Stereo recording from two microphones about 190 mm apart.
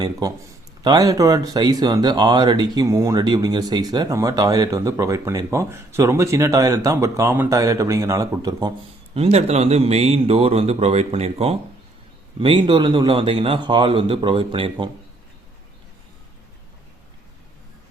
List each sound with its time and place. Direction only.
0.0 s a man's voice: 20° right (ahead or behind)
9.1 s a man's voice: 35° right (ahead or behind)